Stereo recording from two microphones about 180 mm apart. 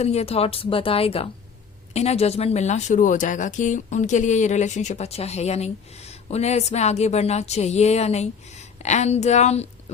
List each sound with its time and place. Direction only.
0.0 s speech: 35° left (ahead or behind)